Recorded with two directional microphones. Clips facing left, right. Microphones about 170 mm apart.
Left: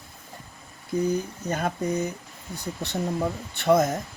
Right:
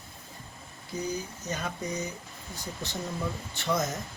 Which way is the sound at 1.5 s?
55° left (ahead or behind).